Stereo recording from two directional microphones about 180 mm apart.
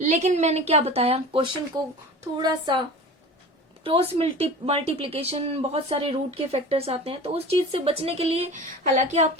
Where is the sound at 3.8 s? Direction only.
30° right (ahead or behind).